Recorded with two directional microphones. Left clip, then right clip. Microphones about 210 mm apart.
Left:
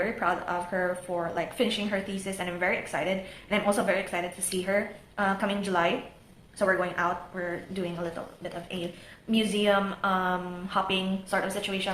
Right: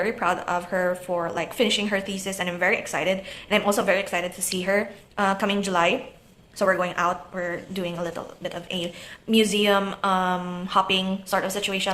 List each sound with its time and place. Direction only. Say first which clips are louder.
0.0 s a woman's voice: right 4 dB; 35° right (ahead or behind)